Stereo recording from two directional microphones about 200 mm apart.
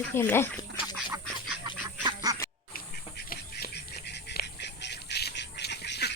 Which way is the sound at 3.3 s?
55° left (ahead or behind).